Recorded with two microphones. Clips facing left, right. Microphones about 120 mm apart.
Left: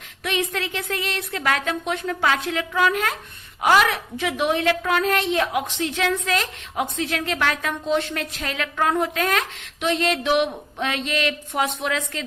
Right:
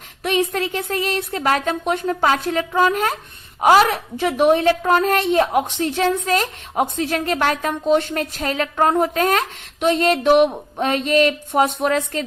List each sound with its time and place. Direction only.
0.2 s a woman's voice: 40° right (ahead or behind)